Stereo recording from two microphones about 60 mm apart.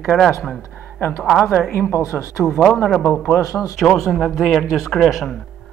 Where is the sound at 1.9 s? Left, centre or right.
Left.